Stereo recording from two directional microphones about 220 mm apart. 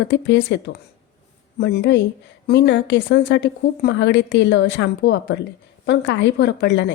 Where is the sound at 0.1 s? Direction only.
55° left (ahead or behind).